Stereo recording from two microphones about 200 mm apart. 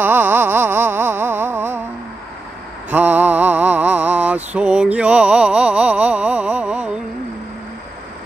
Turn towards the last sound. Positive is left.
turn(degrees=-5)  # may be behind; listen again after turning